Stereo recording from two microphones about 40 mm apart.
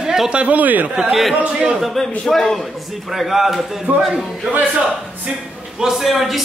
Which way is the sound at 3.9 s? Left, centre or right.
Right.